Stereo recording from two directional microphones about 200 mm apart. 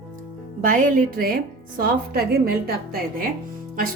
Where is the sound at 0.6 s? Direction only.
40° right (ahead or behind).